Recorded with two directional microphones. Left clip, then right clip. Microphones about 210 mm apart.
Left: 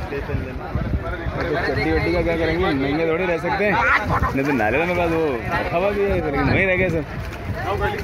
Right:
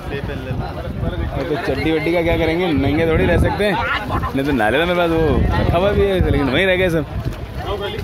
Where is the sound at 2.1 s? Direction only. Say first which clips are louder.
Right 3 dB; 25° right (ahead or behind).